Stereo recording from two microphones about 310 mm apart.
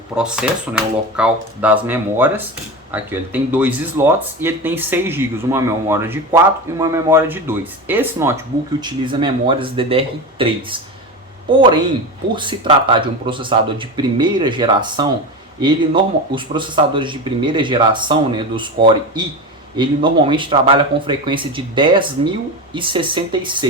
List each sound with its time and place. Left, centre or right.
0.1 s speech: centre